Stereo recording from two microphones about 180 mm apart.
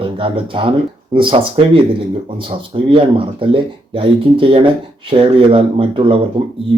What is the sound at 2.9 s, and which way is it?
Speech, 30° right (ahead or behind).